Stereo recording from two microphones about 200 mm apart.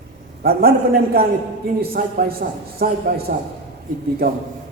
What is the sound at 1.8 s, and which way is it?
A man's voice, 50° right (ahead or behind).